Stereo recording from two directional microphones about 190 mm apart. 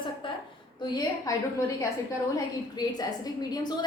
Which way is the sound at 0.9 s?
15° left (ahead or behind).